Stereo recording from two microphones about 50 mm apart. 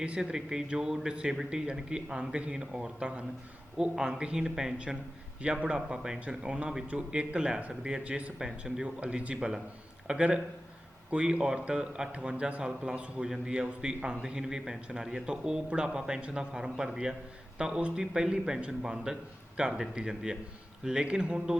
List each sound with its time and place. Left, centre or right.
0.2 s a man's voice: centre
5.4 s a man's voice: right
8.0 s a man's voice: right
8.4 s a man's voice: centre
17.7 s a man's voice: right